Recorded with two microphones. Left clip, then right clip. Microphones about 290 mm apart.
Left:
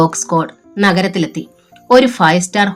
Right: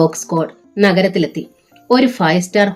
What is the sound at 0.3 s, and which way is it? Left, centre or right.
Speech, left.